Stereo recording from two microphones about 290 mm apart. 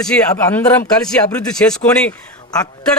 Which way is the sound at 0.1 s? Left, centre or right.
Centre.